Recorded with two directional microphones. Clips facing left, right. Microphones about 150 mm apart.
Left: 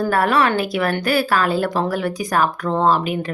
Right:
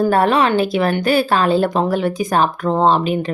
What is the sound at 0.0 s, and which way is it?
A woman's voice, 25° right (ahead or behind).